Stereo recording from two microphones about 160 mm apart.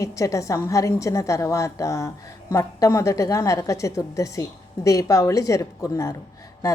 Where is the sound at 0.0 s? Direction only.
20° left (ahead or behind).